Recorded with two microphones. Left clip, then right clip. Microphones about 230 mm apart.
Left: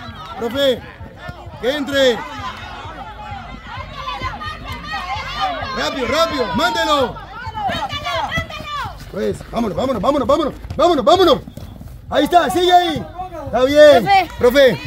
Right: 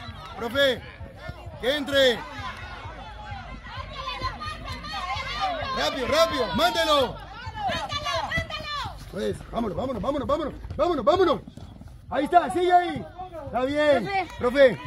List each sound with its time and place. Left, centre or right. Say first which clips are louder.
0.4 s speech: left 6 dB; right
4.8 s run: left 6 dB; right
9.5 s speech: left 9 dB; centre; by 10.5 s left
10.8 s a man's voice: left 9 dB; left